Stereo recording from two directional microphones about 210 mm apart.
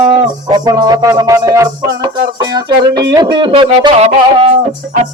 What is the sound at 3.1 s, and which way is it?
Speech, 20° right (ahead or behind).